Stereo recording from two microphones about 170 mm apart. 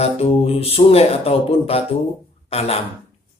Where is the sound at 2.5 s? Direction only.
40° left (ahead or behind).